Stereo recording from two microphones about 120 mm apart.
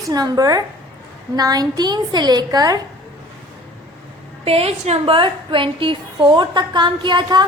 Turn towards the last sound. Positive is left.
turn(degrees=-40)  # may be behind; listen again after turning